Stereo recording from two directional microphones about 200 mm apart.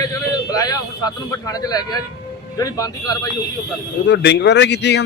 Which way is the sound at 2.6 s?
20° left (ahead or behind).